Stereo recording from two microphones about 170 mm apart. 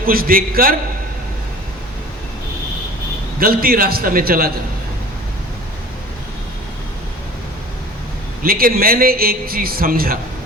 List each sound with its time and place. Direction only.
0.0 s a man's voice: 60° right (ahead or behind)
3.4 s a man's voice: 60° right (ahead or behind)
8.4 s a man's voice: 55° right (ahead or behind)